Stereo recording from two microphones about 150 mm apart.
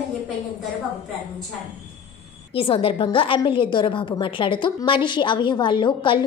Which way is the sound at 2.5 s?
35° left (ahead or behind).